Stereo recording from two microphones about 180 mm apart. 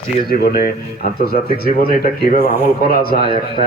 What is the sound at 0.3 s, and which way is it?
Speech, 55° left (ahead or behind).